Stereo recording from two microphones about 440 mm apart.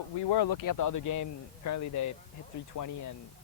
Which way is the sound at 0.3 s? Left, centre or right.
Left.